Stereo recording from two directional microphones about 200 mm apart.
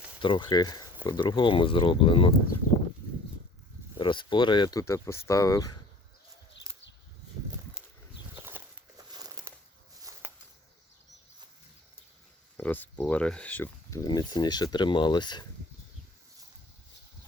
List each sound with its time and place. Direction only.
0.2 s speech: 25° left (ahead or behind)
3.9 s speech: 25° left (ahead or behind)
6.7 s a sound: 15° right (ahead or behind)
8.4 s bird flight: 10° right (ahead or behind)
9.1 s a sound: 20° right (ahead or behind)
12.5 s speech: 10° left (ahead or behind)